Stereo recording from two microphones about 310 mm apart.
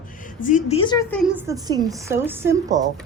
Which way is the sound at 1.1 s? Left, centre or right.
Centre.